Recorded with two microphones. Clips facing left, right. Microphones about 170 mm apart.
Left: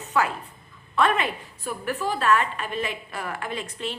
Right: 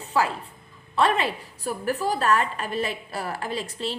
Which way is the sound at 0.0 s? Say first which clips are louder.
Even; 30° right (ahead or behind).